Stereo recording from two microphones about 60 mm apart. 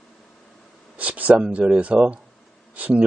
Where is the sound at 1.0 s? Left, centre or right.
Right.